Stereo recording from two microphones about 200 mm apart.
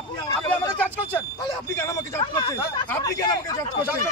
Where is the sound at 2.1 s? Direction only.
25° left (ahead or behind).